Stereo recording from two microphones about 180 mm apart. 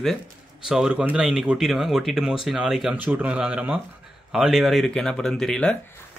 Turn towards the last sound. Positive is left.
turn(degrees=5)  # may be behind; listen again after turning